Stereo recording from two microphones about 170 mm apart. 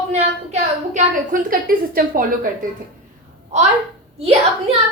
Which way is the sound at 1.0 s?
50° right (ahead or behind).